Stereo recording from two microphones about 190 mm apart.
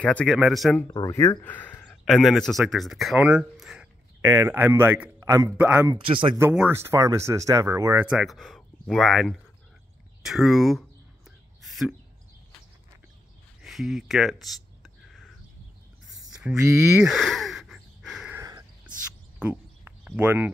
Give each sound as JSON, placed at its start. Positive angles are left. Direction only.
{"t": 0.0, "sound": "speech", "side_deg": 5}
{"t": 0.8, "sound": "speech", "side_deg": 20}
{"t": 5.9, "sound": "speech", "side_deg": -25}
{"t": 6.3, "sound": "speech", "side_deg": -10}
{"t": 11.6, "sound": "bird", "side_deg": 0}
{"t": 13.6, "sound": "a sound", "side_deg": 0}
{"t": 16.5, "sound": "speech", "side_deg": -15}
{"t": 17.0, "sound": "a sound", "side_deg": 0}
{"t": 18.4, "sound": "a sound", "side_deg": -15}